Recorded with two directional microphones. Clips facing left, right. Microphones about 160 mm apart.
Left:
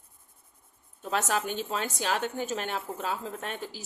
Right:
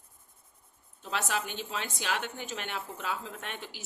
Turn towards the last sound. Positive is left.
turn(degrees=40)  # may be behind; listen again after turning